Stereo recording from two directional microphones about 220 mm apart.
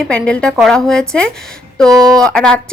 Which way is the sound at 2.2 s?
5° left (ahead or behind).